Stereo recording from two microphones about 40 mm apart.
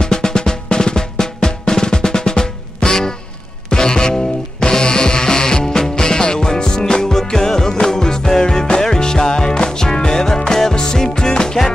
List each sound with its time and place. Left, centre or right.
0.0 s drum: centre
3.7 s music: centre